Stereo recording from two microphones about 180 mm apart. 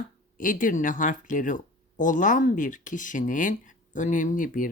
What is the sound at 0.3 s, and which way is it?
Speech, 45° left (ahead or behind).